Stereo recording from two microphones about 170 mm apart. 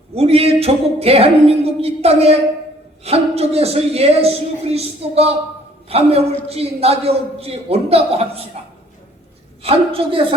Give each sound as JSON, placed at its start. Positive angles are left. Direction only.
{"t": 0.1, "sound": "a man's voice", "side_deg": -35}
{"t": 9.6, "sound": "a man's voice", "side_deg": -35}